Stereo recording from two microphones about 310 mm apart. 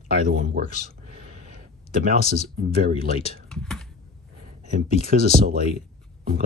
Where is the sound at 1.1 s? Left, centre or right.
Right.